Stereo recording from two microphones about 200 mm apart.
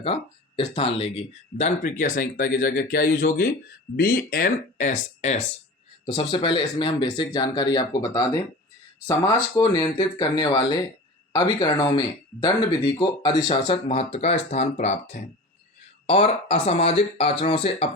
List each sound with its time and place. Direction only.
0.0 s speech: 30° left (ahead or behind)
6.1 s speech: 25° left (ahead or behind)